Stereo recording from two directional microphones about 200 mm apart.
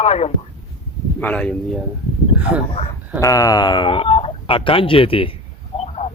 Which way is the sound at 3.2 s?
15° left (ahead or behind).